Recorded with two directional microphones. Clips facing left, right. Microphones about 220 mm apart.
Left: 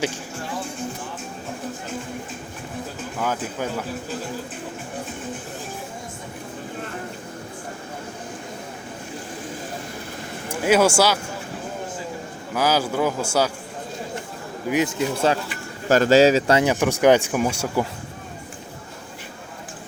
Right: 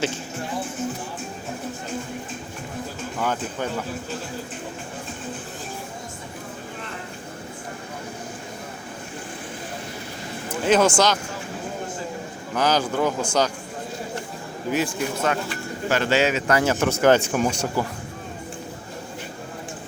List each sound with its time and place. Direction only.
3.2 s speech: 5° left (ahead or behind)
10.6 s speech: 10° left (ahead or behind)
12.5 s speech: 5° left (ahead or behind)
14.7 s speech: 20° left (ahead or behind)
15.9 s a man's voice: 40° left (ahead or behind)
16.6 s speech: 15° left (ahead or behind)